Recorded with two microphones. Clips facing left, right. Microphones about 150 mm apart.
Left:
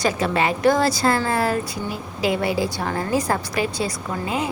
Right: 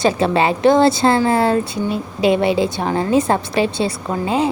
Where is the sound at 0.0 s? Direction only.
30° right (ahead or behind).